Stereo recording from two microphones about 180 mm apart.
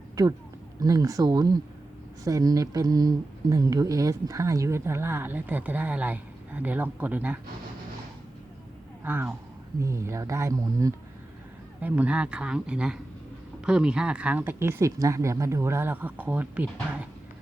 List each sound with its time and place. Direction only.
0.8 s speech: 20° right (ahead or behind)
9.0 s speech: 10° right (ahead or behind)
11.8 s a man's voice: 10° right (ahead or behind)